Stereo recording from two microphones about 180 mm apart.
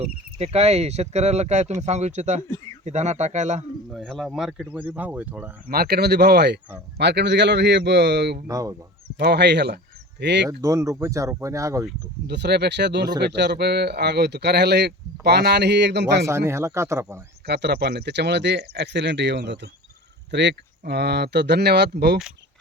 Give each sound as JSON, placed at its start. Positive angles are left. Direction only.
{"t": 0.3, "sound": "speech", "side_deg": -35}
{"t": 3.9, "sound": "speech", "side_deg": 0}
{"t": 5.6, "sound": "speech", "side_deg": -55}
{"t": 8.4, "sound": "speech", "side_deg": -20}
{"t": 9.1, "sound": "speech", "side_deg": -65}
{"t": 10.6, "sound": "speech", "side_deg": -15}
{"t": 12.3, "sound": "speech", "side_deg": -70}
{"t": 16.2, "sound": "speech", "side_deg": -15}
{"t": 17.4, "sound": "speech", "side_deg": -65}